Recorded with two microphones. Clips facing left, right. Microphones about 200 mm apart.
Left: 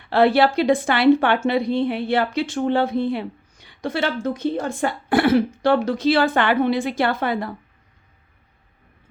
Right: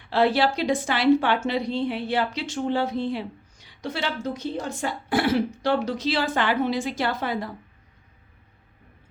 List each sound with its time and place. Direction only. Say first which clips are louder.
0.1 s a woman's voice: left 5 dB; 60° left (ahead or behind)